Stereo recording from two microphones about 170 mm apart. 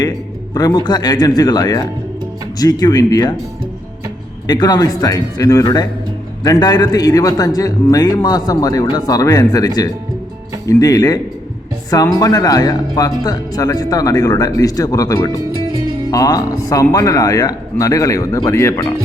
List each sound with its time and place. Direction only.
0.5 s a man's voice: 25° left (ahead or behind)
4.4 s a man's voice: 25° left (ahead or behind)
12.2 s a man's voice: 20° left (ahead or behind)